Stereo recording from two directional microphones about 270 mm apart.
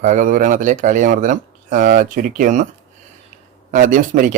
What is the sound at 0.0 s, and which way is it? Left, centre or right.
Speech, right.